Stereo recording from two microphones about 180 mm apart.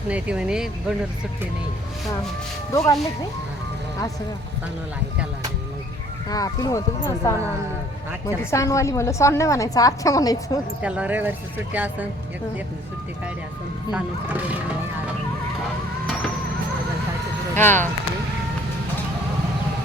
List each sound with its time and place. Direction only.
0.1 s speech: 5° right (ahead or behind)
2.7 s speech: 20° left (ahead or behind)
6.2 s speech: 20° left (ahead or behind)
8.4 s a woman's voice: 15° left (ahead or behind)
10.8 s speech: 10° right (ahead or behind)
13.9 s speech: 10° right (ahead or behind)
17.5 s speech: 10° left (ahead or behind)